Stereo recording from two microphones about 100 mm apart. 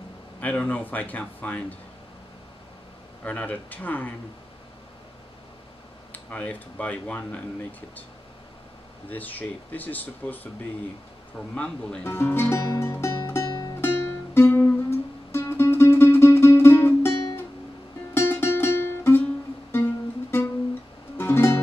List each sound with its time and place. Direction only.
0.4 s speech: 15° left (ahead or behind)
3.3 s speech: 15° left (ahead or behind)
6.1 s speech: 15° left (ahead or behind)
9.1 s speech: 20° left (ahead or behind)
11.5 s speech: 10° left (ahead or behind)
12.1 s music: 25° left (ahead or behind)
13.5 s music: 40° left (ahead or behind)
13.7 s music: 25° left (ahead or behind)